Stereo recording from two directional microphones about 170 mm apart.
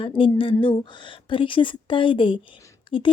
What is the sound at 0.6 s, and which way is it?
Speech, 30° left (ahead or behind).